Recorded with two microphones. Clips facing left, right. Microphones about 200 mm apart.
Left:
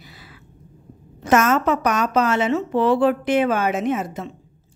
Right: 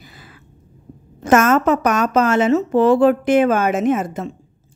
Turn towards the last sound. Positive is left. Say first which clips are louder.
# right 5 dB
turn(degrees=-50)  # may be behind; listen again after turning